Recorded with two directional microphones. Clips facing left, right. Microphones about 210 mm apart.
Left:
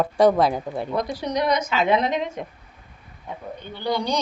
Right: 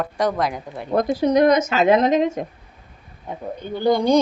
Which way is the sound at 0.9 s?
50° right (ahead or behind).